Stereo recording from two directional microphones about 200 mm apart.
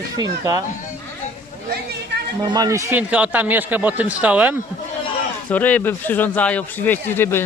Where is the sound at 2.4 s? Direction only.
20° right (ahead or behind).